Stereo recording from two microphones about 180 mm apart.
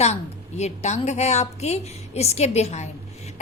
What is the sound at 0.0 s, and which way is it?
A woman's voice, 35° left (ahead or behind).